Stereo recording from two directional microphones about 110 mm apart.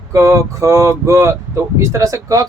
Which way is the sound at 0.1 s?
30° right (ahead or behind).